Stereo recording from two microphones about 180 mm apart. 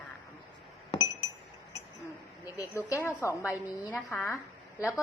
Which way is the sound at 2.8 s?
15° left (ahead or behind).